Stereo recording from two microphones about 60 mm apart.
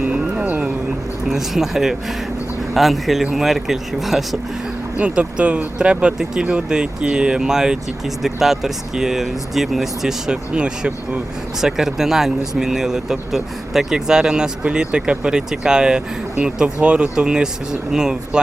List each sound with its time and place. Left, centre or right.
0.1 s music: centre
1.3 s speech: centre
4.9 s speech: centre